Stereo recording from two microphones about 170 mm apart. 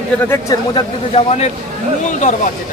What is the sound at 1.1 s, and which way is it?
Speech, 40° left (ahead or behind).